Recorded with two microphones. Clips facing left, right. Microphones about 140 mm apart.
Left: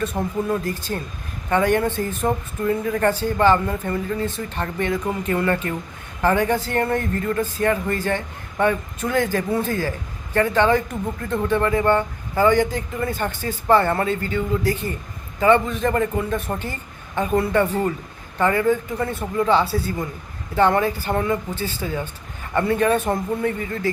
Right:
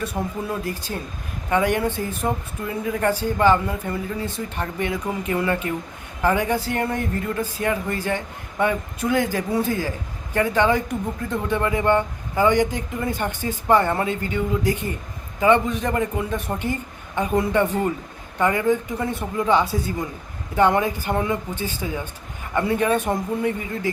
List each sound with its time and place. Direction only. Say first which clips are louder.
0.1 s speech: left 2 dB; centre (ahead or behind)
0.6 s speech: left 2 dB; 10° right (ahead or behind)